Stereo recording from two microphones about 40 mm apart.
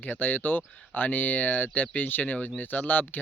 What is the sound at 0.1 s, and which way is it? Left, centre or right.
Speech, left.